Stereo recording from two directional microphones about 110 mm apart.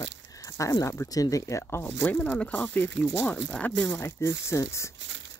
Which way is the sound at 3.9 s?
25° left (ahead or behind).